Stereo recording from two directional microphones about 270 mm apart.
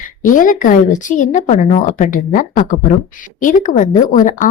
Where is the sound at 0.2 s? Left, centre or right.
Left.